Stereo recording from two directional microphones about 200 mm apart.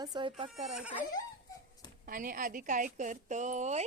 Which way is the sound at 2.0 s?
45° right (ahead or behind).